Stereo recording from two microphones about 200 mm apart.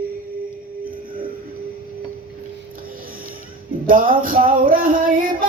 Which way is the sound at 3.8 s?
45° right (ahead or behind).